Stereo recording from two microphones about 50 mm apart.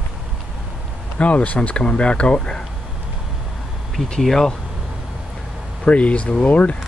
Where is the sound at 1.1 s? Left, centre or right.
Left.